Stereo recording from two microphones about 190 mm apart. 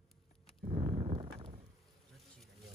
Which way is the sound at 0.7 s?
30° right (ahead or behind).